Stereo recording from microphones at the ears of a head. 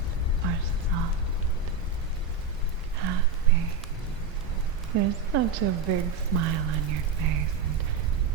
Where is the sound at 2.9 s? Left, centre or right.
Right.